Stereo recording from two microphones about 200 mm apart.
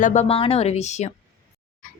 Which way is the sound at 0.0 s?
35° left (ahead or behind).